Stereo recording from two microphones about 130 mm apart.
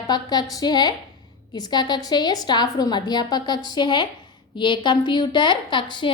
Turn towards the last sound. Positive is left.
turn(degrees=40)  # may be behind; listen again after turning